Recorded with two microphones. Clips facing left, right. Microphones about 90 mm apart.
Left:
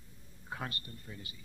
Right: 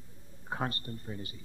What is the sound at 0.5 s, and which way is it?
Speech, 30° right (ahead or behind).